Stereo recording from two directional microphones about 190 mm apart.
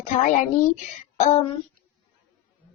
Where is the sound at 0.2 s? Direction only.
40° left (ahead or behind).